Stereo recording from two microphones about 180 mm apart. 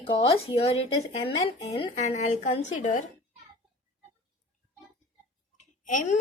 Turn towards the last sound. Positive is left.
turn(degrees=45)  # may be behind; listen again after turning